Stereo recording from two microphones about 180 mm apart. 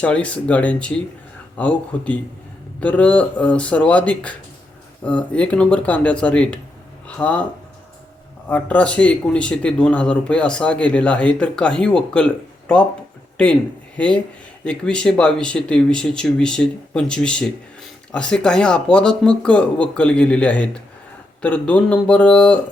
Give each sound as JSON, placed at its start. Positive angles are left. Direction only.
{"t": 0.0, "sound": "speech", "side_deg": 5}
{"t": 8.4, "sound": "speech", "side_deg": 10}